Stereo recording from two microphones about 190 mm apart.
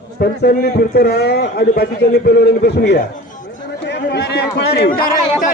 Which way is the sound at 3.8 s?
60° left (ahead or behind).